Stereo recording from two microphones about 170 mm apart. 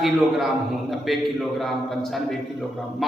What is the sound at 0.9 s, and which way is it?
A man's voice, centre (ahead or behind).